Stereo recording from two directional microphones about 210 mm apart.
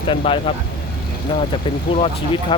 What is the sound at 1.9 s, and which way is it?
Speech, 25° left (ahead or behind).